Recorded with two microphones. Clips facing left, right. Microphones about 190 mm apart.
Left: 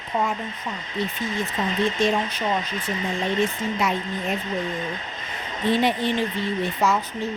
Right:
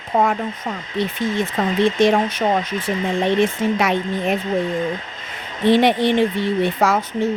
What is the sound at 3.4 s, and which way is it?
Speech, 85° right.